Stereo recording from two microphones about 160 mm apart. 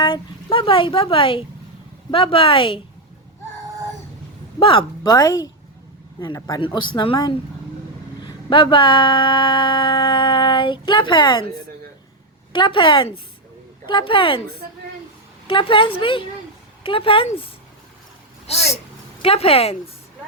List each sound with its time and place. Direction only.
0.0 s speech: 30° left (ahead or behind)
4.6 s speech: 30° left (ahead or behind)
12.5 s speech: 30° left (ahead or behind)
15.4 s speech: 30° left (ahead or behind)
19.2 s speech: 35° left (ahead or behind)